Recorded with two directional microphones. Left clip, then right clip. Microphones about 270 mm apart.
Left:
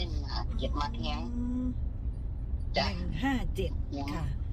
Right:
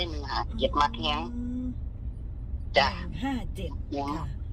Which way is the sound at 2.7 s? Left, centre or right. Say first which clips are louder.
Right 8 dB; right.